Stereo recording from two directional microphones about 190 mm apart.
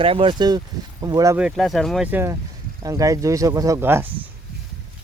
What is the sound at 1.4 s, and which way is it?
Speech, centre (ahead or behind).